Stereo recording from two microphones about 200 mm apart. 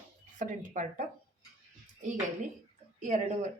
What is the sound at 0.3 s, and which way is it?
Speech, 40° right (ahead or behind).